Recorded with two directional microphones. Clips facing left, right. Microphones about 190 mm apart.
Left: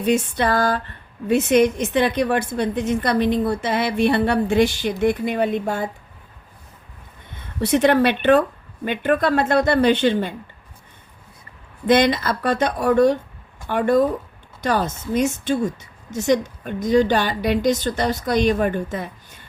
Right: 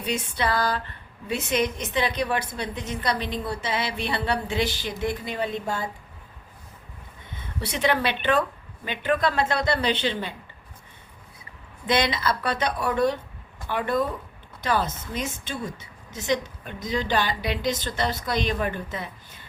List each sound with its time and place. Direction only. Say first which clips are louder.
0.0 s a woman's voice: left 8 dB; 50° left (ahead or behind)
7.7 s a woman's voice: left 8 dB; 50° left (ahead or behind)
11.9 s a woman's voice: left 7 dB; 50° left (ahead or behind)